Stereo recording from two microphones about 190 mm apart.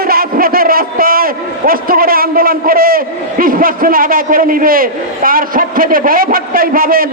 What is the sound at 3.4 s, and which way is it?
A man's voice, 50° right (ahead or behind).